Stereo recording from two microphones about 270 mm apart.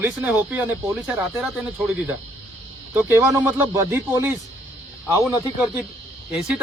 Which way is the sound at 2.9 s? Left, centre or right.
Centre.